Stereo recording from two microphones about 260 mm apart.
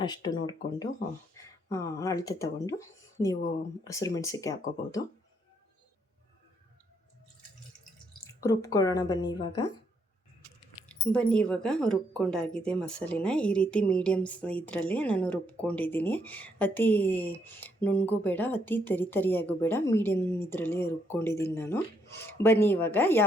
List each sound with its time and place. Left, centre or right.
0.0 s speech: centre
1.7 s speech: centre
8.4 s speech: centre
10.8 s speech: centre